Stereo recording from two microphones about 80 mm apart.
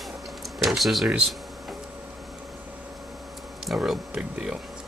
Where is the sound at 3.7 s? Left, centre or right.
Centre.